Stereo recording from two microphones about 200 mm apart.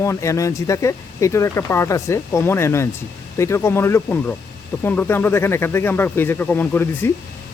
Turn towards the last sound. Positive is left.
turn(degrees=10)  # may be behind; listen again after turning